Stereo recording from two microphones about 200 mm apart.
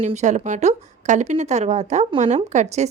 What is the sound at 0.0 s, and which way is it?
Speech, 35° right (ahead or behind).